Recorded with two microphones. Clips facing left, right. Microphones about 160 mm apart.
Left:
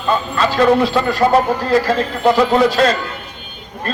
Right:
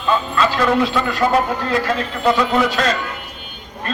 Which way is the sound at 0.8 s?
35° left (ahead or behind).